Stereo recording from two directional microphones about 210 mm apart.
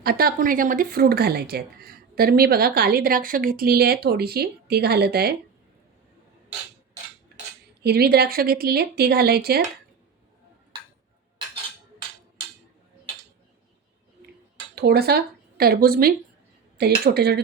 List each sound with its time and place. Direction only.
0.0 s speech: 45° right (ahead or behind)
7.8 s speech: 50° right (ahead or behind)
14.8 s speech: 50° right (ahead or behind)